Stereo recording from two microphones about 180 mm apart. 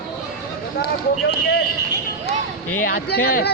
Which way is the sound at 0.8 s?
60° left (ahead or behind).